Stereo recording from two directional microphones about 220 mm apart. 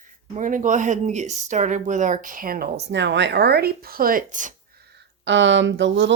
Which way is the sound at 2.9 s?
55° right (ahead or behind).